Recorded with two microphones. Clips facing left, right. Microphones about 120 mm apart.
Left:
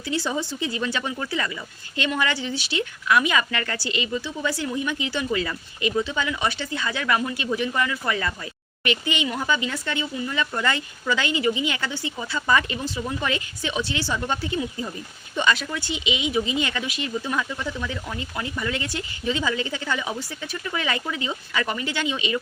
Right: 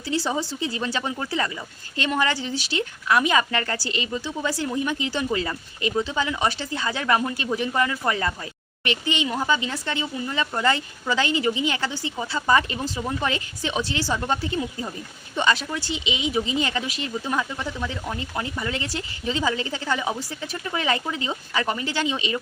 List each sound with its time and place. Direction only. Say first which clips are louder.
0.0 s speech: right 1 dB; 35° right (ahead or behind)